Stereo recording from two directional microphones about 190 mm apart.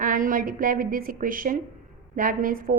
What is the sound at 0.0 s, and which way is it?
A woman's voice, 45° right (ahead or behind).